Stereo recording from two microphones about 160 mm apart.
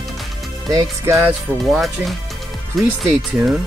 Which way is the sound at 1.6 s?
Centre (ahead or behind).